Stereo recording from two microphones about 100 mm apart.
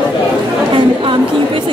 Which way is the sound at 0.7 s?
55° right (ahead or behind).